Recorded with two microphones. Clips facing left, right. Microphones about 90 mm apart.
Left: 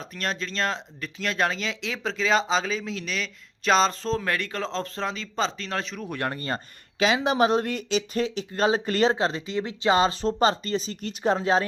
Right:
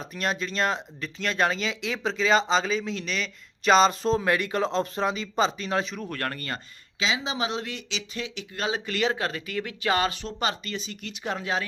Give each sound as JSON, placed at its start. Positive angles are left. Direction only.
{"t": 0.0, "sound": "speech", "side_deg": -5}
{"t": 4.0, "sound": "speech", "side_deg": -15}
{"t": 6.1, "sound": "speech", "side_deg": 15}
{"t": 7.0, "sound": "speech", "side_deg": 55}
{"t": 10.2, "sound": "speech", "side_deg": 35}